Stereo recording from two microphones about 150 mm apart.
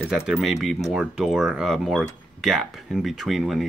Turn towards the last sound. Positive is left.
turn(degrees=0)  # may be behind; listen again after turning